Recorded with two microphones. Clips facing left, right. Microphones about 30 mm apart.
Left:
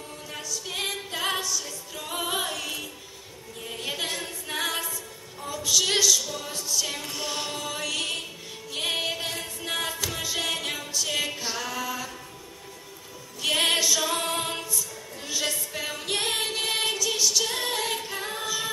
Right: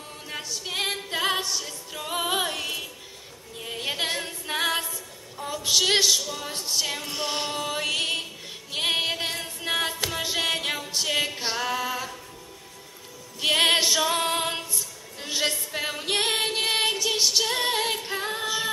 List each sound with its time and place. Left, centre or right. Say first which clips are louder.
0.3 s a capella: right 2 dB; right
1.4 s music: right 1 dB; right
2.0 s music: right 3 dB; centre
4.0 s a capella: right 3 dB; right
5.6 s a woman's voice: right 2 dB; right
6.5 s music: right 2 dB; right
13.4 s music: right 3 dB; right
14.0 s female singing: right 3 dB; right
14.7 s music: left 1 dB; right
18.0 s a capella: right 3 dB; right